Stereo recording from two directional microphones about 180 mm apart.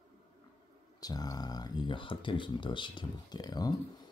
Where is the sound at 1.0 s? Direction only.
20° left (ahead or behind).